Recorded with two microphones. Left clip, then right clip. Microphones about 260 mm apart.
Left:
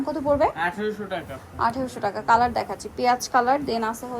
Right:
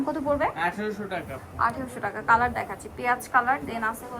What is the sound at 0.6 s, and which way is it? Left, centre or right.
Speech, centre.